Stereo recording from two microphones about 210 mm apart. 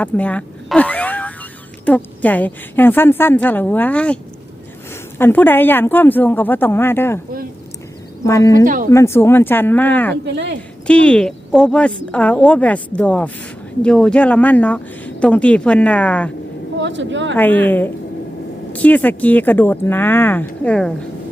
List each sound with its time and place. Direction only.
0.0 s speech: 5° left (ahead or behind)
8.2 s speech: 15° left (ahead or behind)
8.6 s speech: 40° right (ahead or behind)
8.9 s speech: 10° left (ahead or behind)
10.2 s speech: 55° right (ahead or behind)
10.8 s speech: 5° left (ahead or behind)
16.7 s a woman's voice: 60° right (ahead or behind)
17.3 s speech: 10° left (ahead or behind)